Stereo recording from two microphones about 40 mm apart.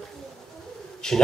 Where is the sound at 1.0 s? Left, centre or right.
Centre.